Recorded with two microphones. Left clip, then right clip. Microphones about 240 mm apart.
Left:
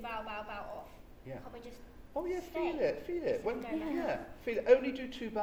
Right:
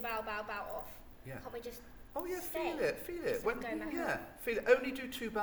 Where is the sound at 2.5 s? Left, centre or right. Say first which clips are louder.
Even; right.